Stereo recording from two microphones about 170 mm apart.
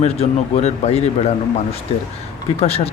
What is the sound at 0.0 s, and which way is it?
Speech, 40° left (ahead or behind).